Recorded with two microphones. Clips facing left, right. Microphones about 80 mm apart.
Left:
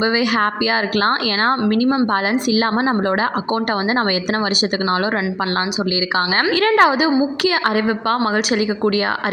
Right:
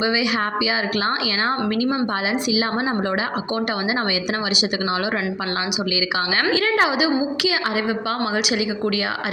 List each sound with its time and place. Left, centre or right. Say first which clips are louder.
0.0 s a woman's voice: left 4 dB; left
6.5 s a woman's voice: left 6 dB; left